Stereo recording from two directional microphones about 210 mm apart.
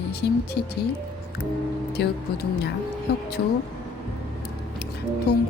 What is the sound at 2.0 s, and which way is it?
Music, 50° left (ahead or behind).